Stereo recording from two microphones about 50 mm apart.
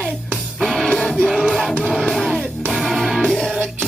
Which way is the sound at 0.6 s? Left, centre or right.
Centre.